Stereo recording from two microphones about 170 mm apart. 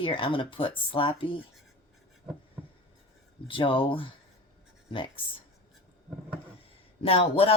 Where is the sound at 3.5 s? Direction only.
30° left (ahead or behind).